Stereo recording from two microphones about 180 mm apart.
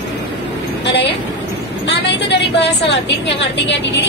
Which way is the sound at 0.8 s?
70° left (ahead or behind).